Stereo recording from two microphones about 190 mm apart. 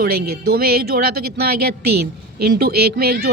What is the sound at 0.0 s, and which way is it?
A woman's voice, 50° right (ahead or behind).